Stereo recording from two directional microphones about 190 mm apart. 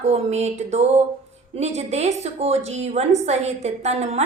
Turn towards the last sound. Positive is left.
turn(degrees=-35)  # may be behind; listen again after turning